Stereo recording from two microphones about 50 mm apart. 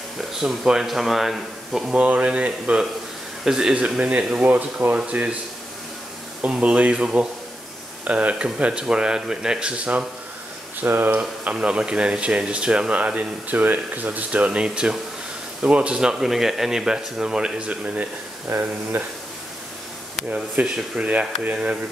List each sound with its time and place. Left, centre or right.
0.3 s speech: centre
1.9 s speech: right
3.4 s speech: centre
4.0 s speech: right
4.5 s speech: right
6.4 s speech: right
10.8 s speech: right
11.5 s speech: centre
18.5 s speech: right
20.2 s speech: right
20.6 s speech: centre
21.0 s speech: right